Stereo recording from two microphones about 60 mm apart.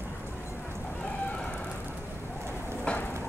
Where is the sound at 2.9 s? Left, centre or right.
Centre.